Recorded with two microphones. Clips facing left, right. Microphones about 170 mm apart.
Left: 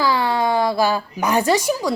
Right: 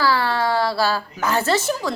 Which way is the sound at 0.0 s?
15° left (ahead or behind).